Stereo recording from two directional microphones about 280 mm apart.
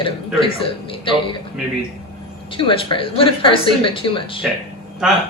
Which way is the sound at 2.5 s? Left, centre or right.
Centre.